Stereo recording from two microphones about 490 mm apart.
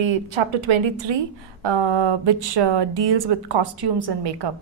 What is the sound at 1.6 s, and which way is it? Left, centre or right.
A woman's voice, right.